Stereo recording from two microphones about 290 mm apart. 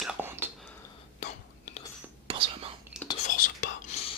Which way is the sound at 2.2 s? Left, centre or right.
Centre.